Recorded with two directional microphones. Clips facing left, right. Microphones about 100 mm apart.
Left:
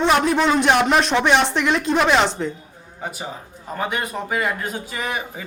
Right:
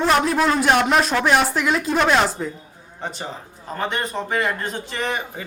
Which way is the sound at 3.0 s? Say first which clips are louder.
Even; 10° left (ahead or behind).